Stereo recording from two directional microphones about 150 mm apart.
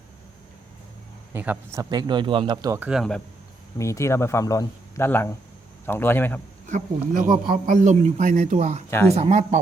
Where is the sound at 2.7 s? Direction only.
10° right (ahead or behind).